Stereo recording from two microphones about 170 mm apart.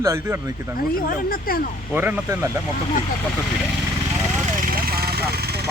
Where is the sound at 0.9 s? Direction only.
55° left (ahead or behind).